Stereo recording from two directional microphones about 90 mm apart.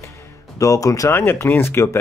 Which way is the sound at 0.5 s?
40° left (ahead or behind).